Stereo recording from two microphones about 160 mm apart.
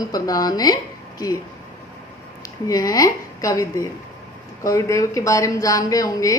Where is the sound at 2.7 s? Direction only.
20° left (ahead or behind).